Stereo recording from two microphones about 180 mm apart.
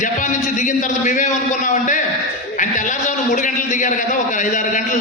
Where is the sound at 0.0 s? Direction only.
45° left (ahead or behind).